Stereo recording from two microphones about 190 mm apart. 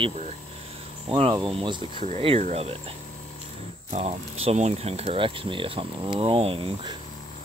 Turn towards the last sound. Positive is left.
turn(degrees=-30)  # may be behind; listen again after turning